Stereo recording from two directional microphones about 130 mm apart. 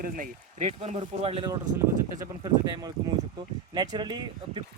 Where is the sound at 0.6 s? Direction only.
55° right (ahead or behind).